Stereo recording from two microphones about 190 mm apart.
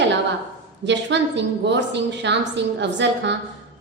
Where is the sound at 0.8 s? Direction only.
65° right (ahead or behind).